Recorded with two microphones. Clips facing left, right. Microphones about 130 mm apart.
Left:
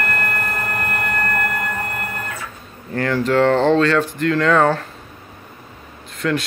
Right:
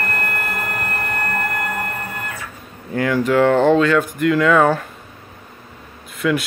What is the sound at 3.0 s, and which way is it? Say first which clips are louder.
Speech: right 1 dB; 10° right (ahead or behind).